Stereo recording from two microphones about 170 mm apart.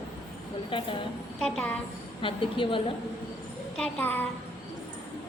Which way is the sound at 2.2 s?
30° left (ahead or behind).